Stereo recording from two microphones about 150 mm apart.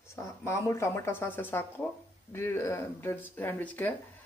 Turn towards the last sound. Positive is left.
turn(degrees=10)  # may be behind; listen again after turning